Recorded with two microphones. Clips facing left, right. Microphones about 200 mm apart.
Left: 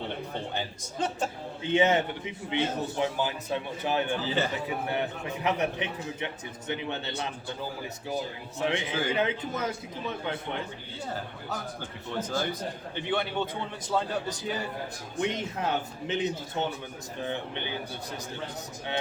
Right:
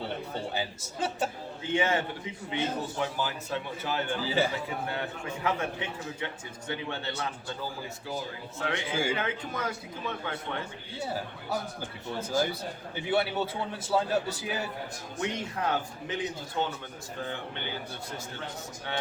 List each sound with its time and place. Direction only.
0.5 s a man's voice: 5° right (ahead or behind)
1.6 s a man's voice: 20° left (ahead or behind)
4.3 s a man's voice: 10° right (ahead or behind)
4.5 s a man's voice: 20° left (ahead or behind)
8.5 s a man's voice: 20° left (ahead or behind)
11.0 s a man's voice: 10° right (ahead or behind)
15.2 s a man's voice: 20° left (ahead or behind)